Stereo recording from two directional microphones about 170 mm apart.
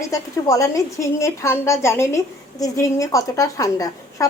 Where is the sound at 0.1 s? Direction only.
20° left (ahead or behind).